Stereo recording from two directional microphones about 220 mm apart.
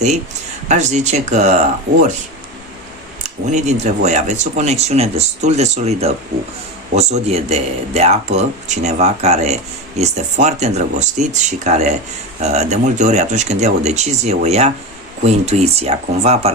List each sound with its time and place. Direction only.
0.7 s speech: 30° right (ahead or behind)
3.4 s speech: 30° right (ahead or behind)